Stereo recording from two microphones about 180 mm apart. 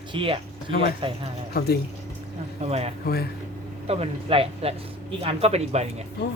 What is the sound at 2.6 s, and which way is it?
Speech, 35° right (ahead or behind).